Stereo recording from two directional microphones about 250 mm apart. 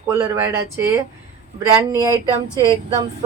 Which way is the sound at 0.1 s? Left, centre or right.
Centre.